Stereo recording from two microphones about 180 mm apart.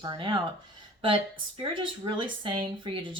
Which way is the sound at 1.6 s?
25° right (ahead or behind).